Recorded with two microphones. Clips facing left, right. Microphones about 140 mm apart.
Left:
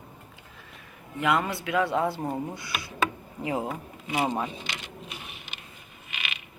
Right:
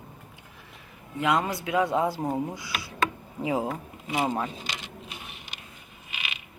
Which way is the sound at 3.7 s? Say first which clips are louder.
Even; 5° left (ahead or behind).